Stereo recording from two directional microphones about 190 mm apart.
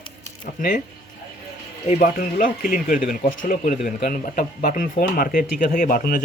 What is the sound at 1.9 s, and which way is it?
Speech, 45° left (ahead or behind).